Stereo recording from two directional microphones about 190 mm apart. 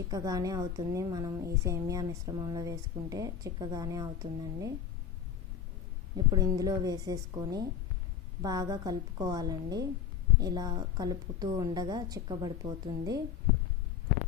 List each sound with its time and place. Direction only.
0.1 s a woman's voice: 20° right (ahead or behind)
6.1 s a woman's voice: 20° right (ahead or behind)